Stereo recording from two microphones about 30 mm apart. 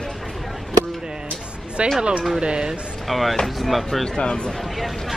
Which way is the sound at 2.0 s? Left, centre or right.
Right.